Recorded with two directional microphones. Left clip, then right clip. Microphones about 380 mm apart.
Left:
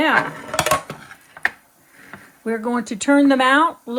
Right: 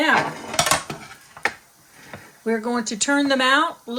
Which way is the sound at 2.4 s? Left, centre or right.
Centre.